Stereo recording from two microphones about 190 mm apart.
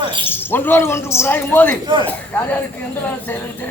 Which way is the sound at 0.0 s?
25° right (ahead or behind).